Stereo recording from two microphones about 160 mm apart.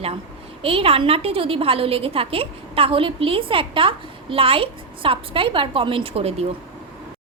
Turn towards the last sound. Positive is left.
turn(degrees=-40)  # may be behind; listen again after turning